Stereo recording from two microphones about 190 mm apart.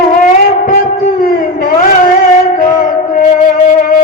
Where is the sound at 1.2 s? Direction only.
50° left (ahead or behind).